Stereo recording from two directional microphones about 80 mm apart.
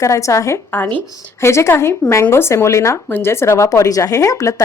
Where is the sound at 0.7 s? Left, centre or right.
Left.